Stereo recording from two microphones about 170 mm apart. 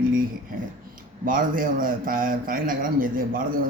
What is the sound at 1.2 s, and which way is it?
A man's voice, 55° right (ahead or behind).